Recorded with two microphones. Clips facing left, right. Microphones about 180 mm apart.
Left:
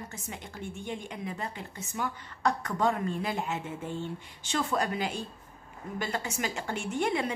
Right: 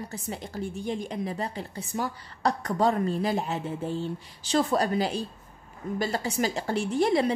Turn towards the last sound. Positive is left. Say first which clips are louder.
# right 6 dB
turn(degrees=-35)  # may be behind; listen again after turning